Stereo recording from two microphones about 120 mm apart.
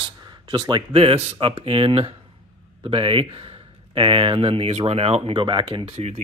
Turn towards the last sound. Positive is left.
turn(degrees=-65)  # may be behind; listen again after turning